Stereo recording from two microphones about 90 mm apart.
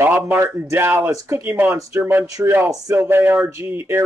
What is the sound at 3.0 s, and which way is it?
Speech, 25° right (ahead or behind).